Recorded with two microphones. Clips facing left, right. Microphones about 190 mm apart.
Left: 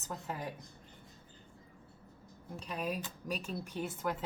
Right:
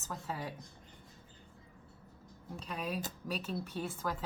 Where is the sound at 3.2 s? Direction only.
10° left (ahead or behind).